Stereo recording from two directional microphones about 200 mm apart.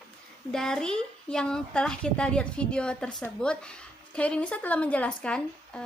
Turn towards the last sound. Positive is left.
turn(degrees=5)  # may be behind; listen again after turning